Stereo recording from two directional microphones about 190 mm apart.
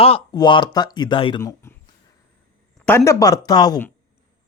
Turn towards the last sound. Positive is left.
turn(degrees=20)  # may be behind; listen again after turning